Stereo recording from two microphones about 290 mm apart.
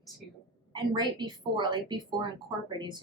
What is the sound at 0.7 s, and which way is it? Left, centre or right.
A woman's voice, centre.